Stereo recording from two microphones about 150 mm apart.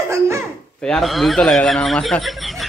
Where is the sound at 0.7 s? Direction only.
5° left (ahead or behind).